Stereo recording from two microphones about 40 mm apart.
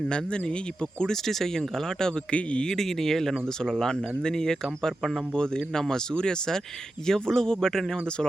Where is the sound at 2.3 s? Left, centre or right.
Left.